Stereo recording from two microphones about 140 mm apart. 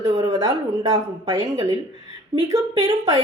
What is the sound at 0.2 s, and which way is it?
Speech, 25° right (ahead or behind).